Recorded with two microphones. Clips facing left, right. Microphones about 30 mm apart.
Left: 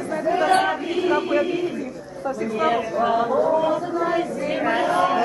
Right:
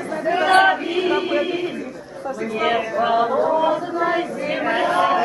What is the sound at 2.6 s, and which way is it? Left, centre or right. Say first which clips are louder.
Chant: right 2 dB; right.